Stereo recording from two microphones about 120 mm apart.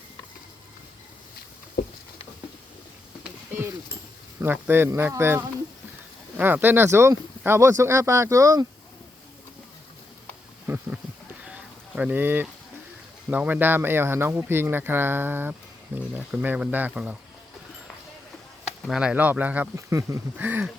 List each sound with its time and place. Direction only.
4.4 s speech: 15° right (ahead or behind)
10.7 s a sound: 15° right (ahead or behind)
13.3 s speech: 15° right (ahead or behind)
18.9 s speech: 5° right (ahead or behind)
19.7 s speech: 25° right (ahead or behind)